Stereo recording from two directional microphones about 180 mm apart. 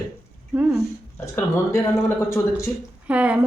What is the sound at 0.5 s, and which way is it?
Speech, 10° right (ahead or behind).